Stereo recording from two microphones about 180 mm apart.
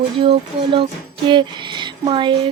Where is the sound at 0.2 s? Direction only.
30° right (ahead or behind).